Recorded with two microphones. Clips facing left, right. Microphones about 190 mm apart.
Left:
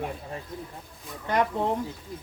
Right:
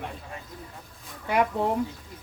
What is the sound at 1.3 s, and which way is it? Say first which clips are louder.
Speech: right 1 dB; 10° right (ahead or behind).